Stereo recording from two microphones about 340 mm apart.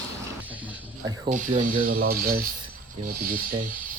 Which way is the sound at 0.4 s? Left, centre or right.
Centre.